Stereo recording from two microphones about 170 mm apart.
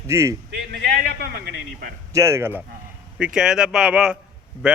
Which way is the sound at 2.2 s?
15° right (ahead or behind).